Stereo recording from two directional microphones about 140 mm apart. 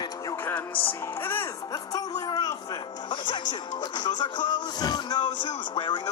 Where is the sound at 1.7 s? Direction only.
30° left (ahead or behind).